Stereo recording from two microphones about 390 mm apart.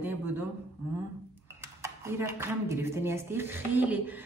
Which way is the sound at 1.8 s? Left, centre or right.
Centre.